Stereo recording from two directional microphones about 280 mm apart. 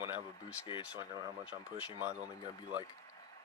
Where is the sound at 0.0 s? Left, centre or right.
Centre.